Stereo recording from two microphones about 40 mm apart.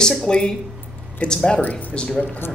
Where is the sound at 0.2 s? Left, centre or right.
Left.